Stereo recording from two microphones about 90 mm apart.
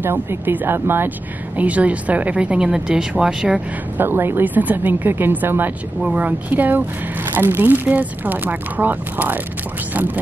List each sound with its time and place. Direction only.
0.0 s speech: 25° right (ahead or behind); by 3.6 s 5° right (ahead or behind)
4.0 s speech: 25° right (ahead or behind)